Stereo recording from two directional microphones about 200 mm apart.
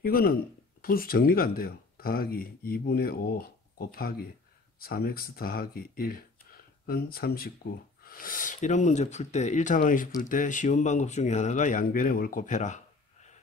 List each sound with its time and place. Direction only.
0.0 s speech: 45° left (ahead or behind)